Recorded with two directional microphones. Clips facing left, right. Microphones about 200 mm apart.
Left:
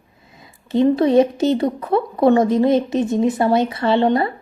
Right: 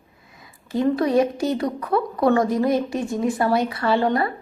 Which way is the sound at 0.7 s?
25° left (ahead or behind).